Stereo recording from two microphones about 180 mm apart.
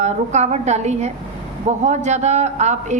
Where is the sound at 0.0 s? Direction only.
40° right (ahead or behind).